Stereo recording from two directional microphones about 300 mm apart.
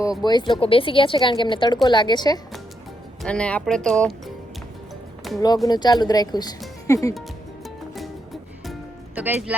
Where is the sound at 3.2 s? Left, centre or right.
Centre.